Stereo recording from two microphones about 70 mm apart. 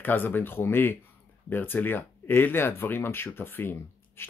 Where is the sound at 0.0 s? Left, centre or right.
Left.